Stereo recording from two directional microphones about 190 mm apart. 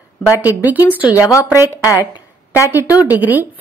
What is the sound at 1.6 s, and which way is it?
A woman's voice, 15° left (ahead or behind).